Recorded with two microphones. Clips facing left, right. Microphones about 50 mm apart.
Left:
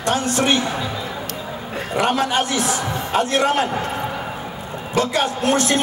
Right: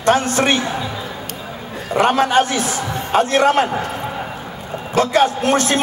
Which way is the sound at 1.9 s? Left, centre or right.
Right.